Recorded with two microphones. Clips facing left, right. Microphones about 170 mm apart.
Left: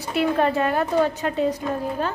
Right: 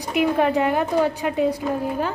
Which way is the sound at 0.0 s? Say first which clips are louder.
Right 1 dB; 15° right (ahead or behind).